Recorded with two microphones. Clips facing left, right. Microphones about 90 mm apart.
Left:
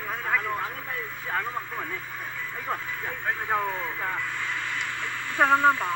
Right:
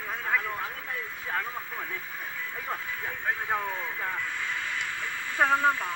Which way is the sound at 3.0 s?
20° left (ahead or behind).